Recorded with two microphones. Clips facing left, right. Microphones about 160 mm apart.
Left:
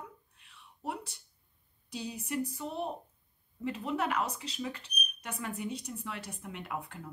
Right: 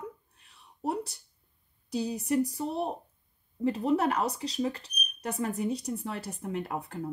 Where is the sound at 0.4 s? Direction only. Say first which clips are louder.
Right 9 dB; 40° right (ahead or behind).